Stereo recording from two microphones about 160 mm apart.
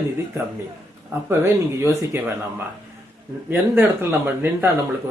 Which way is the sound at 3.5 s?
15° right (ahead or behind).